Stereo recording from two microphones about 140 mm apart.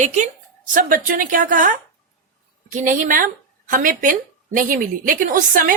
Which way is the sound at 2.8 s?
65° right (ahead or behind).